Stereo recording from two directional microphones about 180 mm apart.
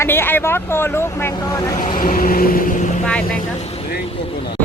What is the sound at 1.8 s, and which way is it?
Speech, 50° left (ahead or behind).